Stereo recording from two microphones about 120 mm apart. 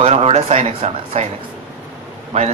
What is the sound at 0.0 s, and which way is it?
Speech, 60° right (ahead or behind).